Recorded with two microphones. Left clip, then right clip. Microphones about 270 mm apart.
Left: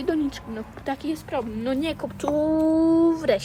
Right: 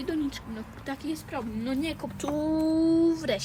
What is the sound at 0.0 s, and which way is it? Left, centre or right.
Speech, left.